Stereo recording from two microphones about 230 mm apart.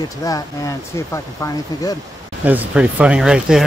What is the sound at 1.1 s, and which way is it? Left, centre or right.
Speech, centre.